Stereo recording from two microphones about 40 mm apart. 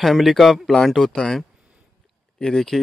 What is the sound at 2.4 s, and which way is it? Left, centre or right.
Speech, centre.